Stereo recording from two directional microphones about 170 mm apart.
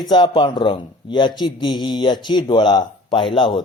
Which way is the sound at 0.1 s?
30° left (ahead or behind).